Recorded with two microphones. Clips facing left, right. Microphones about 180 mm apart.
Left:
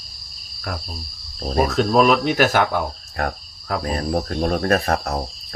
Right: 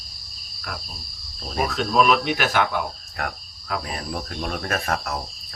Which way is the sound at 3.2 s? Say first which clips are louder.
Left 5 dB; 40° left (ahead or behind).